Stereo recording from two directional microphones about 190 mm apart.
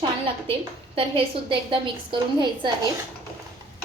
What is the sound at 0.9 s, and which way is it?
A woman's voice, 25° right (ahead or behind).